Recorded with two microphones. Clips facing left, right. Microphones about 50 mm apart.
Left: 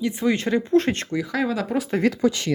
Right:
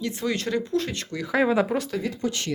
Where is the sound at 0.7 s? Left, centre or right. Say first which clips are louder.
Left 7 dB; left.